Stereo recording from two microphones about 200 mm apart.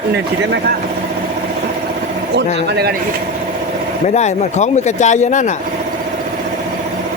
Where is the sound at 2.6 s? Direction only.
55° right (ahead or behind).